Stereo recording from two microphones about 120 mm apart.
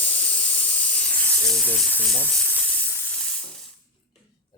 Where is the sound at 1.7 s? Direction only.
10° left (ahead or behind).